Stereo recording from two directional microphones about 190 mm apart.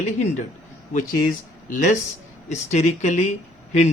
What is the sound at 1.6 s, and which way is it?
Speech, 40° left (ahead or behind).